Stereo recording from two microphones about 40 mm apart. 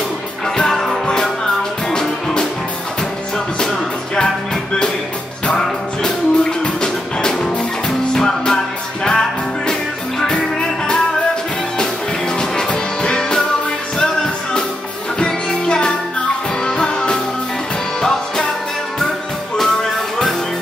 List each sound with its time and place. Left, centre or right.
0.6 s music: centre
3.5 s music: centre
5.6 s music: centre
11.8 s music: centre